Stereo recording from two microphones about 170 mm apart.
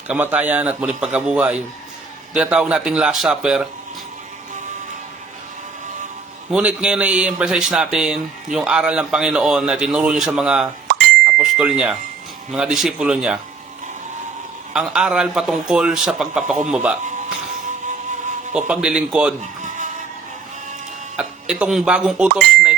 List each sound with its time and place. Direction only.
0.1 s a man's voice: 10° right (ahead or behind)
6.5 s speech: 5° right (ahead or behind)
10.9 s bicycle bell: 5° right (ahead or behind)
12.5 s speech: 5° right (ahead or behind)
14.7 s a man's voice: 5° right (ahead or behind)
18.5 s speech: 5° right (ahead or behind)
19.4 s bleat: 45° right (ahead or behind)
21.2 s speech: 5° right (ahead or behind)